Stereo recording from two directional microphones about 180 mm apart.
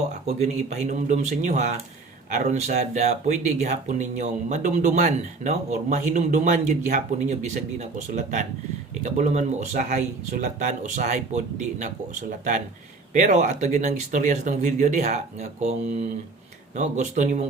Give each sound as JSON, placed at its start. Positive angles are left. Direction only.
{"t": 0.3, "sound": "speech", "side_deg": -40}
{"t": 13.1, "sound": "speech", "side_deg": -45}